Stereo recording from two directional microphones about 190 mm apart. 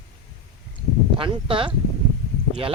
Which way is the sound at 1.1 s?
30° right (ahead or behind).